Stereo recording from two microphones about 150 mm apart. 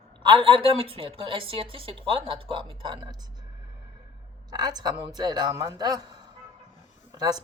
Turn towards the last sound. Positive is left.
turn(degrees=-25)  # may be behind; listen again after turning